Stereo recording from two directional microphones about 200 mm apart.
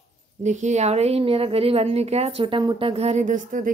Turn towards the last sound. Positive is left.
turn(degrees=-40)  # may be behind; listen again after turning